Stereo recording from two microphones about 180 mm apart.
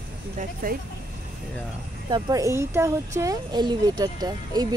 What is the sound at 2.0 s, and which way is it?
Speech, 25° right (ahead or behind).